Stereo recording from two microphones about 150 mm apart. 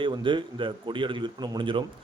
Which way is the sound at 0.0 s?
35° right (ahead or behind).